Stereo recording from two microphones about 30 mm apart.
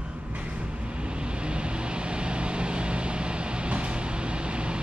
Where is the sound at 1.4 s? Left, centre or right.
Right.